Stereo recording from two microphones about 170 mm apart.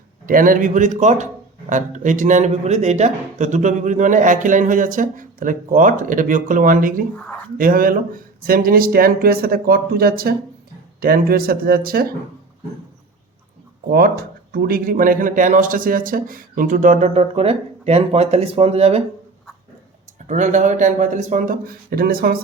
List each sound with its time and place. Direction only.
0.3 s a man's voice: 55° right (ahead or behind)
13.9 s a man's voice: 65° right (ahead or behind); by 19.0 s 35° right (ahead or behind)
20.2 s a man's voice: 45° right (ahead or behind)